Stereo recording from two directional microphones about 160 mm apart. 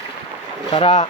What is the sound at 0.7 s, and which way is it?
Speech, 40° left (ahead or behind).